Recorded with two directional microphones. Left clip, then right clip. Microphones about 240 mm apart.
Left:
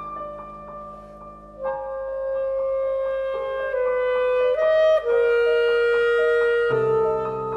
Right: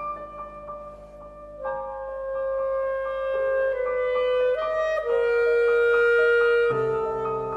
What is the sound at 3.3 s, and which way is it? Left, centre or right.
Music, centre.